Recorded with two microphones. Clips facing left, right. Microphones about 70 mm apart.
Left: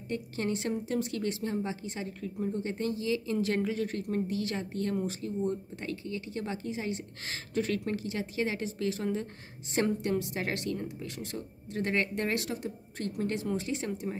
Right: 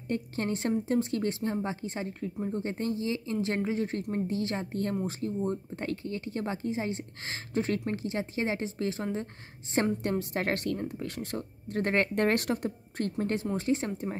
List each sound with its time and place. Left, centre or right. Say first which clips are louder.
0.1 s speech: right 1 dB; right